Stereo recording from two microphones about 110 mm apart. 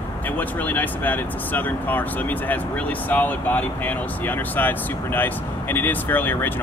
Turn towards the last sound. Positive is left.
turn(degrees=15)  # may be behind; listen again after turning